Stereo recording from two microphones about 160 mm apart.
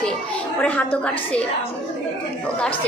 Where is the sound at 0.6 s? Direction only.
10° left (ahead or behind).